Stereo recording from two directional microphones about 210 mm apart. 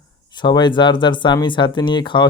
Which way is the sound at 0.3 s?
20° left (ahead or behind).